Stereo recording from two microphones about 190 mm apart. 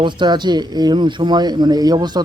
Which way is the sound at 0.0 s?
25° right (ahead or behind).